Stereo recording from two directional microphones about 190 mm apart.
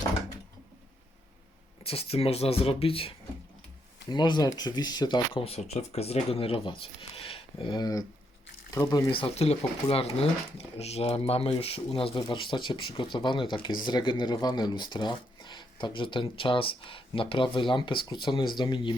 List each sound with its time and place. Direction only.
1.8 s speech: 30° left (ahead or behind)